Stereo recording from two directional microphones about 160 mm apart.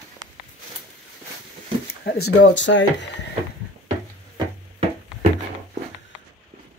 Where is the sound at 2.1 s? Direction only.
90° left.